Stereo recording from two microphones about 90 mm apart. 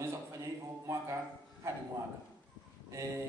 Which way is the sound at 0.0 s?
30° right (ahead or behind).